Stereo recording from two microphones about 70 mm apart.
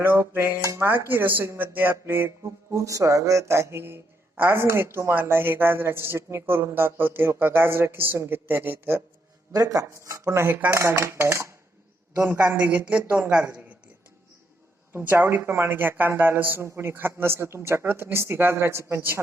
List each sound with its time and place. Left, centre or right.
0.0 s speech: right
0.6 s dishes: right
0.9 s speech: right
9.5 s speech: right
9.9 s speech: right
12.9 s speech: centre
14.9 s speech: right